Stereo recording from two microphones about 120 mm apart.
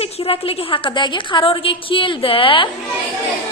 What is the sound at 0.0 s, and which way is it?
A woman's voice, 55° left (ahead or behind).